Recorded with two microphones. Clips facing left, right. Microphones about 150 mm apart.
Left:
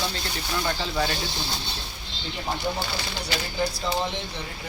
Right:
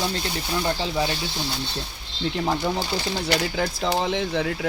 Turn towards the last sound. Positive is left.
turn(degrees=-90)